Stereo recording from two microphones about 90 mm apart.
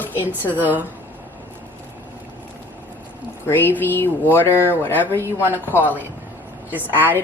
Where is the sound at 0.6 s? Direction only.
20° right (ahead or behind).